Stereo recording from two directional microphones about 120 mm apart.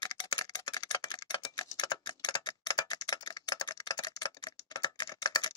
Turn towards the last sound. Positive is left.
turn(degrees=35)  # may be behind; listen again after turning